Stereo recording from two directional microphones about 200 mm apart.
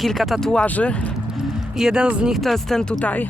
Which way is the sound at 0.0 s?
Centre (ahead or behind).